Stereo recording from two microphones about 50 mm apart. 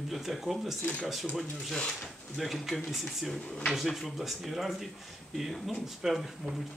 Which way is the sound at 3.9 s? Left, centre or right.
Centre.